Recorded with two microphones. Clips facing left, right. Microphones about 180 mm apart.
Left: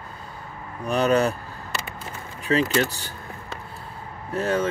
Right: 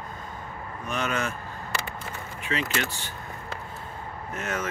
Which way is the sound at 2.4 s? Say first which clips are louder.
Left 8 dB; 35° left (ahead or behind).